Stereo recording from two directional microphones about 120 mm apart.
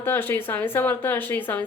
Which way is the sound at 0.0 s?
15° left (ahead or behind).